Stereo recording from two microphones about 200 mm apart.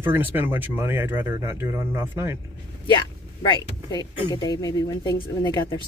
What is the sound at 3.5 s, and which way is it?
Speech, 20° left (ahead or behind).